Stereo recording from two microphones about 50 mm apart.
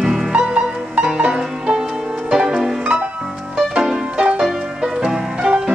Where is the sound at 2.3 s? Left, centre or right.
Centre.